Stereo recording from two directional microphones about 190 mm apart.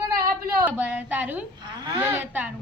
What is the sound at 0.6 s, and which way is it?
Speech, 5° right (ahead or behind).